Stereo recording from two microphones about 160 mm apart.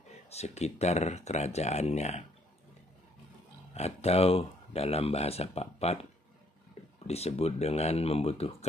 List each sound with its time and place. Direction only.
0.3 s speech: 45° left (ahead or behind)
3.7 s speech: 40° left (ahead or behind)
7.1 s speech: 40° left (ahead or behind)